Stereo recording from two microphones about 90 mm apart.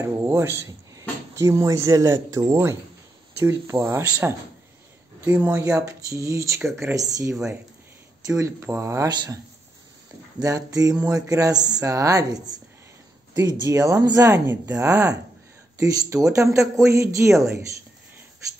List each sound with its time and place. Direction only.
0.0 s speech: 30° right (ahead or behind)
4.2 s a woman's voice: 15° right (ahead or behind)
5.6 s a woman's voice: 35° right (ahead or behind)
7.0 s speech: 40° right (ahead or behind)
10.4 s speech: 40° right (ahead or behind)
13.7 s speech: 35° right (ahead or behind)
14.3 s a woman's voice: 25° right (ahead or behind)
14.9 s speech: 40° right (ahead or behind)